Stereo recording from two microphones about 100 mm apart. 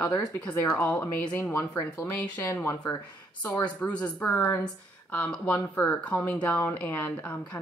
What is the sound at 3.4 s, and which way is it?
Speech, 15° left (ahead or behind).